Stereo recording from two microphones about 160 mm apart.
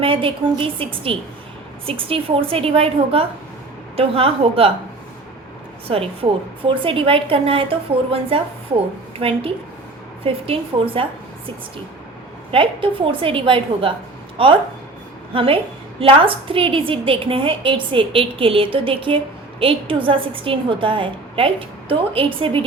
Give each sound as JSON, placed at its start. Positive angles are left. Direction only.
{"t": 0.0, "sound": "a woman's voice", "side_deg": -35}
{"t": 5.9, "sound": "a woman's voice", "side_deg": -35}
{"t": 12.5, "sound": "a woman's voice", "side_deg": -35}